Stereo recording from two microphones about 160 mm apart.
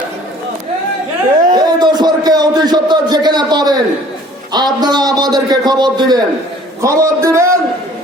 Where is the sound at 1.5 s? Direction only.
25° right (ahead or behind).